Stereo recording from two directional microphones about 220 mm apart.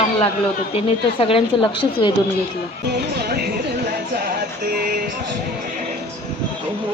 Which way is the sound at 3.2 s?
45° right (ahead or behind).